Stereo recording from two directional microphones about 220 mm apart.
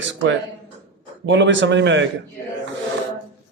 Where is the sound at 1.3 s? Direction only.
55° right (ahead or behind).